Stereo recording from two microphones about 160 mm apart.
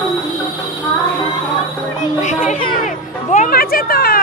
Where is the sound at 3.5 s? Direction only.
65° left (ahead or behind).